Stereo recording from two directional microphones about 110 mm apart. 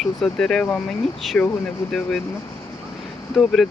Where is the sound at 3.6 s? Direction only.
Centre (ahead or behind).